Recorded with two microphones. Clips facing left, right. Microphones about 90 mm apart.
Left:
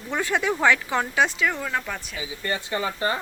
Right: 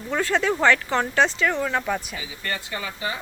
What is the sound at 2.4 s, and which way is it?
Speech, 25° left (ahead or behind).